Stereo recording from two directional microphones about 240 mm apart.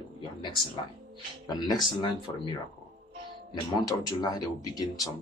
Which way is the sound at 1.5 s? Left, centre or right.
Centre.